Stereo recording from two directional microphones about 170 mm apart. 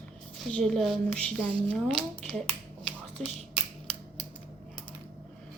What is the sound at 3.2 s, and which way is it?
Speech, 40° right (ahead or behind).